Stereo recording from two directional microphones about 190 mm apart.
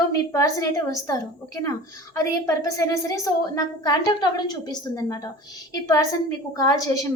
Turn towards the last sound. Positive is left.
turn(degrees=15)  # may be behind; listen again after turning